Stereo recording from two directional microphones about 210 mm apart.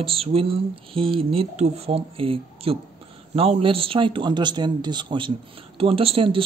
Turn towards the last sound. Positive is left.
turn(degrees=-25)  # may be behind; listen again after turning